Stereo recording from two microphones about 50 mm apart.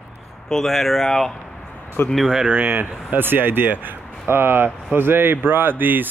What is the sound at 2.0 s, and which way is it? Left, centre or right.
Speech, left.